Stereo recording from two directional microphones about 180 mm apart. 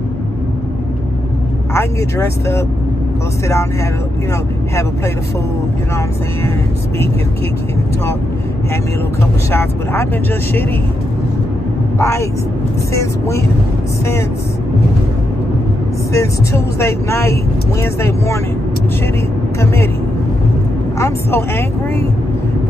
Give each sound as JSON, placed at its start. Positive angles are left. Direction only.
{"t": 1.7, "sound": "speech", "side_deg": 15}
{"t": 9.5, "sound": "speech", "side_deg": 15}
{"t": 12.0, "sound": "speech", "side_deg": 15}
{"t": 16.1, "sound": "speech", "side_deg": 15}
{"t": 19.6, "sound": "speech", "side_deg": 15}
{"t": 21.0, "sound": "speech", "side_deg": 15}